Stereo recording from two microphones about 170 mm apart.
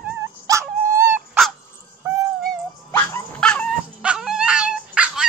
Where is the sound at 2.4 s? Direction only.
10° left (ahead or behind).